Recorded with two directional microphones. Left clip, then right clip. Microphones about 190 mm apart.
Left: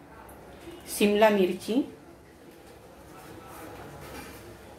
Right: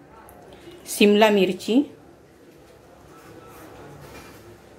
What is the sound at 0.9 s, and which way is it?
Speech, 50° right (ahead or behind).